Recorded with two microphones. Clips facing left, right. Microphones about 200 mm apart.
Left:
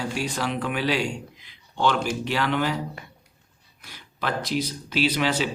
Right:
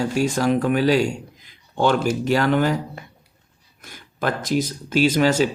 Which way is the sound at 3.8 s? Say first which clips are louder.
Right 5 dB; 45° right (ahead or behind).